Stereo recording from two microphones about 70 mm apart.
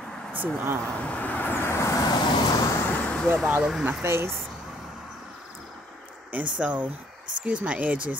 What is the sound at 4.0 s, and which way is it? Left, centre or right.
Speech, right.